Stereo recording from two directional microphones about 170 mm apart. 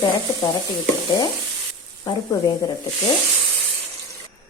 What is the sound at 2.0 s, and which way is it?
Speech, 20° left (ahead or behind).